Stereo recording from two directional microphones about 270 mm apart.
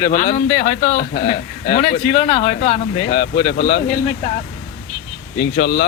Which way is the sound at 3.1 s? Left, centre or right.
Left.